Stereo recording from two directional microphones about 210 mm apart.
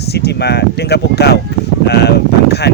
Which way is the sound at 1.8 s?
50° left (ahead or behind).